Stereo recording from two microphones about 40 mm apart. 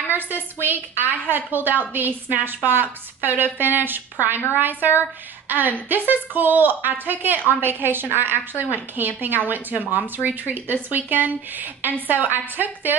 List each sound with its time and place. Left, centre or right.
0.1 s a woman's voice: right
5.5 s a woman's voice: right